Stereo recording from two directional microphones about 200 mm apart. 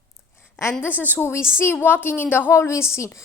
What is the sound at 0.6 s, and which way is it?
A woman's voice, 15° left (ahead or behind).